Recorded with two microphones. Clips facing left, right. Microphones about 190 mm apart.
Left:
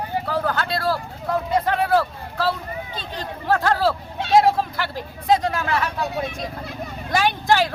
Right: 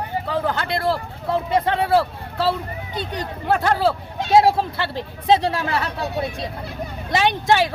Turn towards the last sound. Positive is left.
turn(degrees=-20)  # may be behind; listen again after turning